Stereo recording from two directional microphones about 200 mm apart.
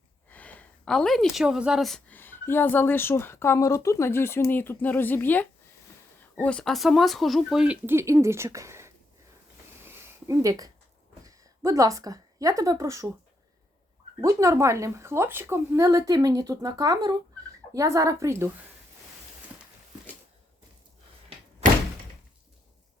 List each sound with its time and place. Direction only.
0.3 s speech: 10° left (ahead or behind); by 8.9 s 15° right (ahead or behind)
9.8 s a sound: 15° right (ahead or behind)
11.3 s a woman's voice: 15° right (ahead or behind)
14.2 s speech: 15° right (ahead or behind)